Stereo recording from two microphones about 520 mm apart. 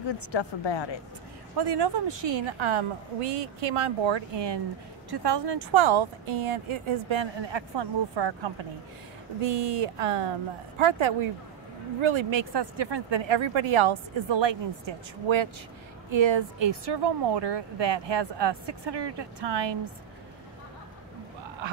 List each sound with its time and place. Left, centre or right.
0.3 s speech: left
1.6 s speech: right
9.4 s speech: right